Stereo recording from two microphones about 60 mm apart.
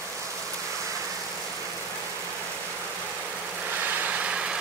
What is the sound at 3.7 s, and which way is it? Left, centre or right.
Vehicle, right.